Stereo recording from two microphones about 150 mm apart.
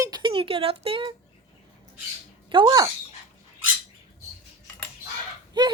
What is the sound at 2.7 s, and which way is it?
Speech, 30° right (ahead or behind).